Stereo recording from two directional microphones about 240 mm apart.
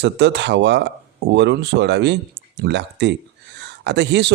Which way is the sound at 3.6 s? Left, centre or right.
Right.